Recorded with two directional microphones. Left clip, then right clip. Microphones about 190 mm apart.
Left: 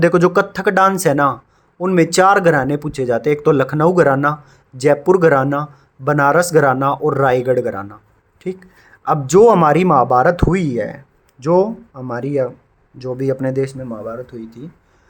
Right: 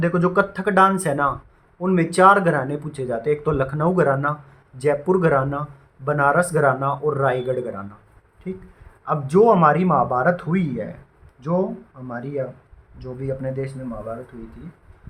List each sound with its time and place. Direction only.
0.0 s speech: 55° left (ahead or behind)